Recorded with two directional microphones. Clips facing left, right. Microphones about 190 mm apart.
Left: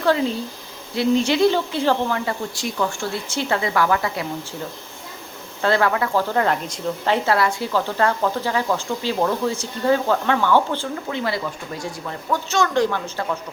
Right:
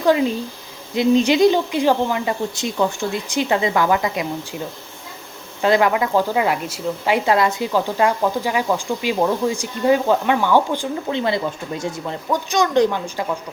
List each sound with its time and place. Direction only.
0.0 s speech: 15° right (ahead or behind)
5.6 s speech: 15° right (ahead or behind)